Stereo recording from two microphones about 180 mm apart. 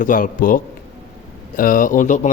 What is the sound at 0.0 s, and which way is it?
A man's voice, 50° left (ahead or behind).